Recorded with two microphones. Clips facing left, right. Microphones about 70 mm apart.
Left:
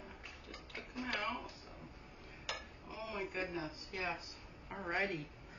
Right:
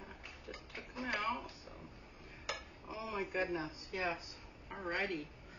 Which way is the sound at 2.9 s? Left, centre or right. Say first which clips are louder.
Right 3 dB; centre.